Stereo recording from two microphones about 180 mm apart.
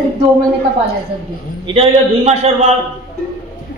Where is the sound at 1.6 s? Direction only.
35° right (ahead or behind).